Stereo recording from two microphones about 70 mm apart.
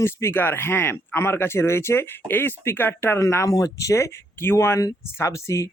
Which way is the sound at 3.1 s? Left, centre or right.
Left.